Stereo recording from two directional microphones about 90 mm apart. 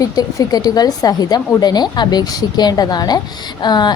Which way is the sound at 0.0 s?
45° left (ahead or behind).